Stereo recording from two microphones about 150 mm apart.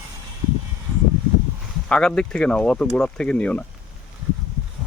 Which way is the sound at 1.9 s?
5° left (ahead or behind).